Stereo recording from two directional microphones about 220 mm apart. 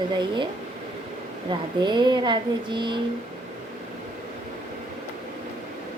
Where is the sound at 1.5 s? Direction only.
20° right (ahead or behind).